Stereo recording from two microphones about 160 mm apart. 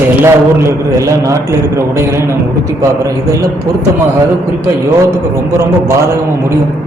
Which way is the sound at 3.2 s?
20° right (ahead or behind).